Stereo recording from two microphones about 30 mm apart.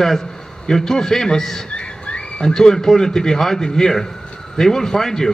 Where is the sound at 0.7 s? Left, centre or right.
Centre.